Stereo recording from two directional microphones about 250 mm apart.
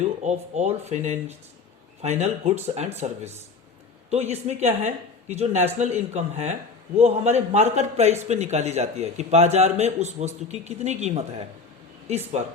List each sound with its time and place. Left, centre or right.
0.0 s a man's voice: right